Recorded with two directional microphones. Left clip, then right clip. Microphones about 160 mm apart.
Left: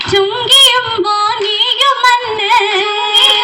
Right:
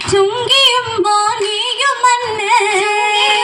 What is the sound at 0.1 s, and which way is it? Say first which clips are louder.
Female singing: left 2 dB; 40° right (ahead or behind).